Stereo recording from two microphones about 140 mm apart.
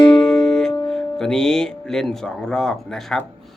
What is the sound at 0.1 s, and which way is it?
Music, 5° left (ahead or behind).